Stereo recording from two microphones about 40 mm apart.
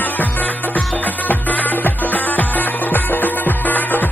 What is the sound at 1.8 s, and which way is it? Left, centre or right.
Music, left.